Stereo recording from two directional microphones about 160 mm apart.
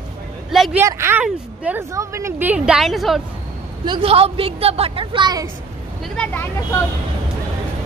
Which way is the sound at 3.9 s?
35° right (ahead or behind).